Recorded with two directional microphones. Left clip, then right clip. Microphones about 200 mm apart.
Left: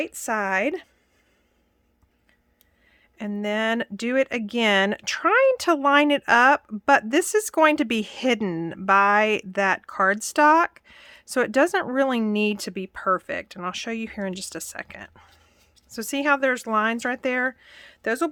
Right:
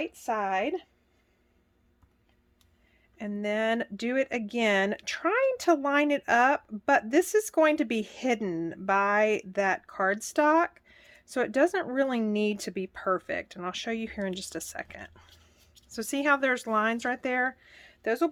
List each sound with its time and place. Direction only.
0.0 s a woman's voice: 55° left (ahead or behind)
3.2 s speech: 35° left (ahead or behind)